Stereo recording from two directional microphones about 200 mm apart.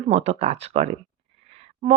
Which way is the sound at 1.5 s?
30° right (ahead or behind).